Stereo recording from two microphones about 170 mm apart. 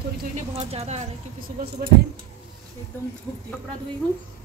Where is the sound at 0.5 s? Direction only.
40° right (ahead or behind).